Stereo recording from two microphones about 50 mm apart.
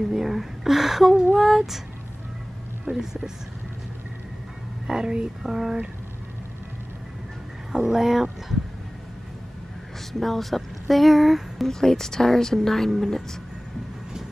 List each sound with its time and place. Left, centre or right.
0.1 s a sound: centre
2.8 s speech: centre
4.8 s speech: centre
5.4 s speech: centre
7.7 s speech: centre
10.2 s speech: centre
11.7 s speech: centre